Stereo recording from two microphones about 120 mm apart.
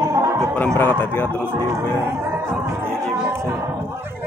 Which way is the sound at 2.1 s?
20° right (ahead or behind).